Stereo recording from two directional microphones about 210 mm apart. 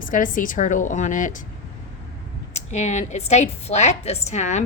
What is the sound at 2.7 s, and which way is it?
A woman's voice, 35° left (ahead or behind).